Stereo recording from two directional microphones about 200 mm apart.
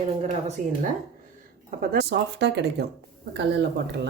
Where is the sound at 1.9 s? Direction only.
55° right (ahead or behind).